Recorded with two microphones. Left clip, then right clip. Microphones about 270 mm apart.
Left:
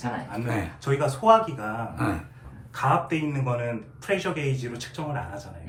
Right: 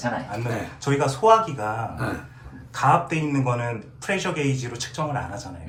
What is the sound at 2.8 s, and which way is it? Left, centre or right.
A man's voice, centre.